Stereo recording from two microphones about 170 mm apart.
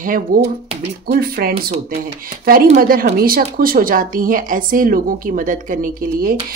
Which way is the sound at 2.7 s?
60° right (ahead or behind).